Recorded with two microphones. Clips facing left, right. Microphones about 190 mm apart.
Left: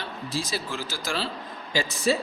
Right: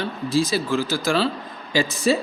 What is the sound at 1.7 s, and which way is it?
Speech, 85° right.